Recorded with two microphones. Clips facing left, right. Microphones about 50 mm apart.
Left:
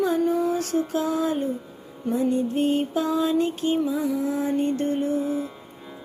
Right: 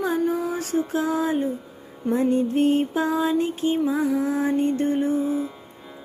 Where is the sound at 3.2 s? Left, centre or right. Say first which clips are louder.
Even; centre.